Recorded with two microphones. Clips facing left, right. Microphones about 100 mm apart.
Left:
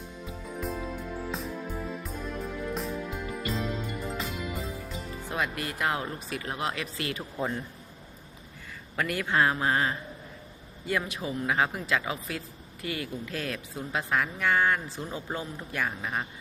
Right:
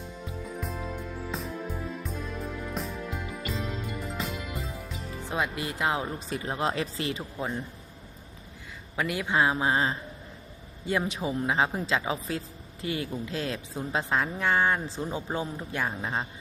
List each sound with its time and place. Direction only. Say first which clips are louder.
0.6 s music: left 4 dB; centre (ahead or behind)
5.3 s a woman's voice: right 1 dB; 20° right (ahead or behind)
7.2 s speech: left 1 dB; 10° right (ahead or behind)
9.0 s a woman's voice: even; 15° right (ahead or behind)